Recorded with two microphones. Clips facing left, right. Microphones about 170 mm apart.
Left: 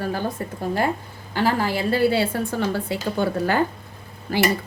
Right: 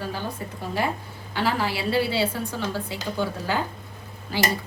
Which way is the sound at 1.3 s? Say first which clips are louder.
Left 4 dB; 45° left (ahead or behind).